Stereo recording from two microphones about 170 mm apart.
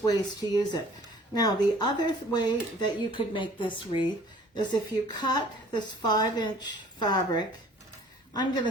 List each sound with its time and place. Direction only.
0.0 s a woman's voice: 20° left (ahead or behind)